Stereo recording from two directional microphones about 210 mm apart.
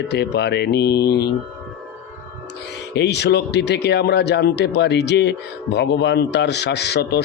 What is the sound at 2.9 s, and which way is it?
Speech, 55° left (ahead or behind).